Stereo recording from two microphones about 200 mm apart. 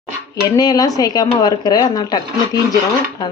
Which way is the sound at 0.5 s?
20° left (ahead or behind).